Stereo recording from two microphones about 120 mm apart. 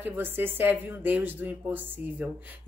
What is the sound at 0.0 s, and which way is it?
A woman's voice, 15° right (ahead or behind).